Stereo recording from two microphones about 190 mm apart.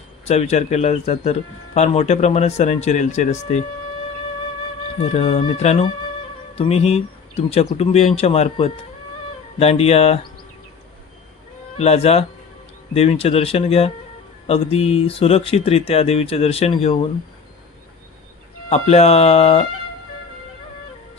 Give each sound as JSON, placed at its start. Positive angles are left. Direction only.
{"t": 0.3, "sound": "speech", "side_deg": 35}
{"t": 4.9, "sound": "speech", "side_deg": 35}
{"t": 11.8, "sound": "speech", "side_deg": 35}
{"t": 18.7, "sound": "speech", "side_deg": 35}